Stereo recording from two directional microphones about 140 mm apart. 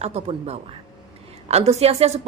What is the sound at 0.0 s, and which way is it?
Speech, 45° right (ahead or behind).